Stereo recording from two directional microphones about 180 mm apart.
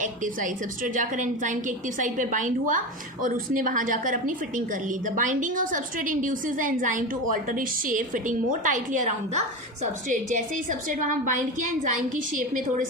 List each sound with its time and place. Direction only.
0.0 s a woman's voice: 45° right (ahead or behind)